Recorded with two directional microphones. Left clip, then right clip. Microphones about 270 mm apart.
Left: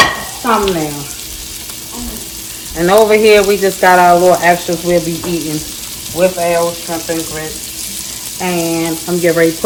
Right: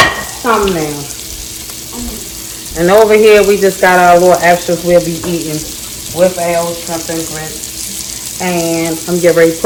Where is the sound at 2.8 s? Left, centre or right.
Left.